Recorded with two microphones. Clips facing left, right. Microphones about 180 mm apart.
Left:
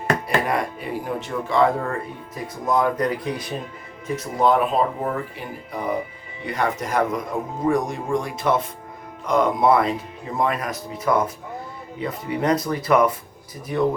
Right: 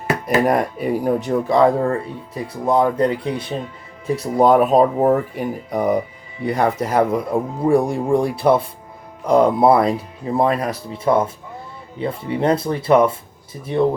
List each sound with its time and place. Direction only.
0.4 s speech: 45° right (ahead or behind); by 13.8 s 30° right (ahead or behind)